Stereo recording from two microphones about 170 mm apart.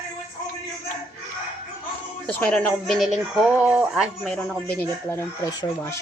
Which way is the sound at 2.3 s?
10° left (ahead or behind).